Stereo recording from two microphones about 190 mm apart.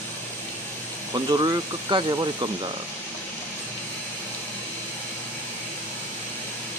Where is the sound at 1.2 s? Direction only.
20° right (ahead or behind).